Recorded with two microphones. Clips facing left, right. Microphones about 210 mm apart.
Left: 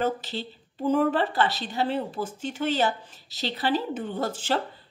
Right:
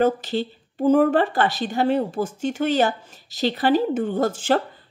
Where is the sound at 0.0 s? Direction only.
50° right (ahead or behind).